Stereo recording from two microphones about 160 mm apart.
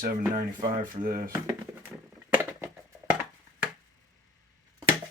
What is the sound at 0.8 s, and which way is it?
Speech, 60° right (ahead or behind).